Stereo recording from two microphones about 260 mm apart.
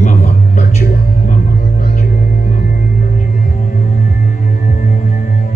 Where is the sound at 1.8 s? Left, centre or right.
Left.